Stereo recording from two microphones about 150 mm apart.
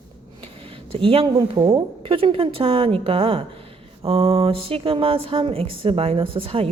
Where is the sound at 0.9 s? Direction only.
40° right (ahead or behind).